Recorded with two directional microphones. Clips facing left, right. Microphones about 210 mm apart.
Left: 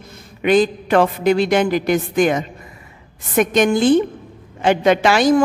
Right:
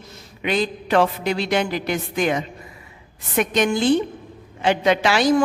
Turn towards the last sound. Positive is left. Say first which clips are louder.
# left 4 dB
turn(degrees=50)  # may be behind; listen again after turning